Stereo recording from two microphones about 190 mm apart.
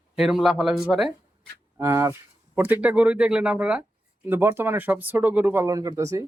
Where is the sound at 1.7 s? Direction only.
15° right (ahead or behind).